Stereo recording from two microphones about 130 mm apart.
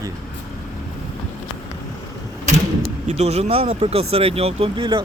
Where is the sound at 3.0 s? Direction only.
55° right (ahead or behind).